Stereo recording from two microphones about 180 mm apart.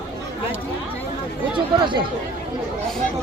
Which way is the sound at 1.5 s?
25° right (ahead or behind).